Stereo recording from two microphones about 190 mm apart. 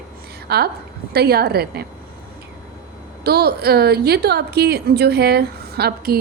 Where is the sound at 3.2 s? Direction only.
55° right (ahead or behind).